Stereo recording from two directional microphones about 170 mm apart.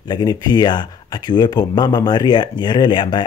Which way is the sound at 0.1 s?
25° left (ahead or behind).